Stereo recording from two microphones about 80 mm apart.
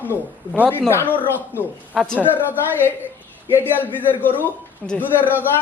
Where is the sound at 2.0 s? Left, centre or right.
Centre.